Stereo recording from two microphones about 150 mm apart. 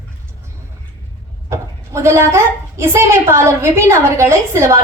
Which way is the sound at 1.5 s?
20° right (ahead or behind).